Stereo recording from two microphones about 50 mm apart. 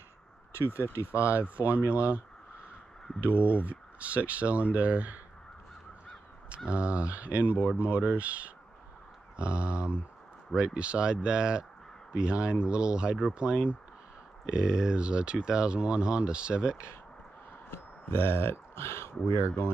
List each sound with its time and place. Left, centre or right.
1.2 s speech: right
3.3 s speech: right
6.7 s speech: right
17.6 s speech: left